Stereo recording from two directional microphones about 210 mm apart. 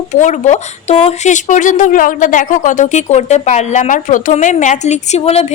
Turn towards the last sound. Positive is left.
turn(degrees=30)  # may be behind; listen again after turning